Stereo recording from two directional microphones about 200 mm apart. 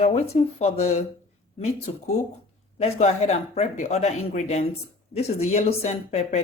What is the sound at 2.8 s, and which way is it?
Speech, 30° left (ahead or behind).